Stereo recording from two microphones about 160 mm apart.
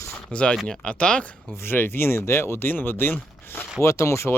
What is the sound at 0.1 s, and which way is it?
Speech, 5° left (ahead or behind).